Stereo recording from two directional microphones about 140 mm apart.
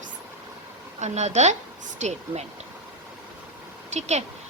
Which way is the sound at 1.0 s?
55° right (ahead or behind).